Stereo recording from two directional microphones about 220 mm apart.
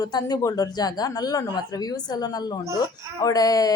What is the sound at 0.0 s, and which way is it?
Speech, 20° left (ahead or behind).